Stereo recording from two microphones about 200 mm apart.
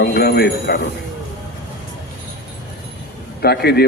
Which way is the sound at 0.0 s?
50° left (ahead or behind).